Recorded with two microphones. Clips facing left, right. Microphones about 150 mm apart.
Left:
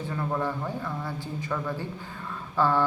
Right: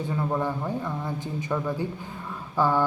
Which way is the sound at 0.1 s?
15° right (ahead or behind).